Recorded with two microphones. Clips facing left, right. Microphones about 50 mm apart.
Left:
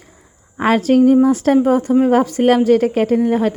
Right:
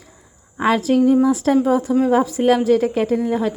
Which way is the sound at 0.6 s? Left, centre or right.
Left.